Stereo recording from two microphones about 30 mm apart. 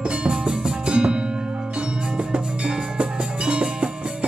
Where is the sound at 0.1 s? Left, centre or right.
Right.